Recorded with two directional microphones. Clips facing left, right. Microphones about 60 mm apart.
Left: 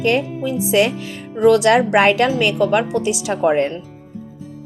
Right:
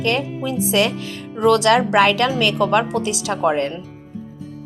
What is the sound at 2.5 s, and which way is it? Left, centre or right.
A woman's voice, centre.